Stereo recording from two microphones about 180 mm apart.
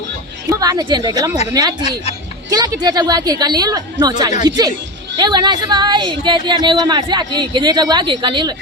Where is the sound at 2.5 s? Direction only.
20° right (ahead or behind).